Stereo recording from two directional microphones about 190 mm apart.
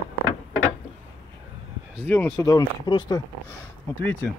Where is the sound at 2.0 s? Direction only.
5° left (ahead or behind); by 3.2 s 20° left (ahead or behind).